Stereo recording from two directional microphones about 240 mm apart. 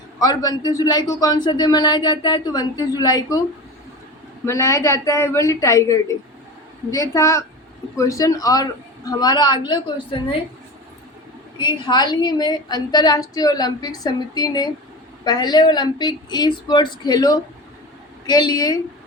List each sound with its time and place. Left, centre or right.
0.2 s a man's voice: centre
4.4 s a man's voice: centre
11.5 s a man's voice: centre